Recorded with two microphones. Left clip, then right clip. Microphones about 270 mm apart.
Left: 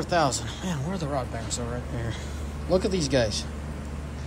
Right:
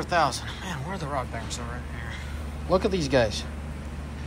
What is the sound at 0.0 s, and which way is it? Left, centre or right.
Speech, centre.